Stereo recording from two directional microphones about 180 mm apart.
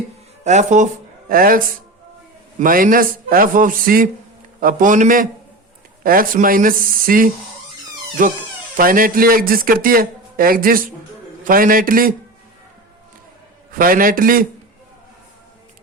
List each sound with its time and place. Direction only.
0.4 s a man's voice: 40° right (ahead or behind)
13.7 s a man's voice: 50° right (ahead or behind)